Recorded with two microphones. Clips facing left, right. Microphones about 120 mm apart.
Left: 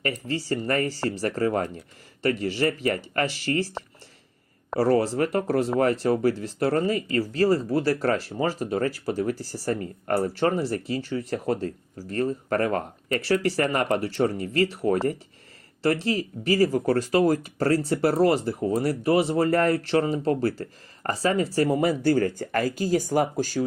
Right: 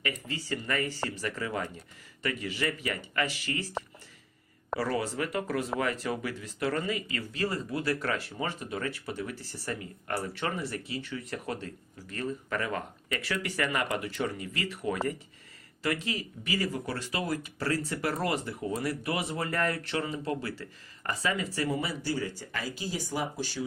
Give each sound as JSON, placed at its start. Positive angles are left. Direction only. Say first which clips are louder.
{"t": 0.0, "sound": "speech", "louder": "left 7 dB", "side_deg": 35}
{"t": 4.8, "sound": "speech", "louder": "left 10 dB", "side_deg": 40}